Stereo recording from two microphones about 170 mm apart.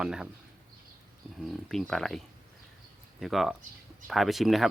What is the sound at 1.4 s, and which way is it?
Speech, centre (ahead or behind).